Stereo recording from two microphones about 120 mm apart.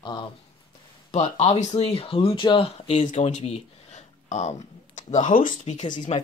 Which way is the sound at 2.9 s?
80° left.